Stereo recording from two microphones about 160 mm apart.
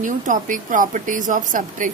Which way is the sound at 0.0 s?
55° right (ahead or behind).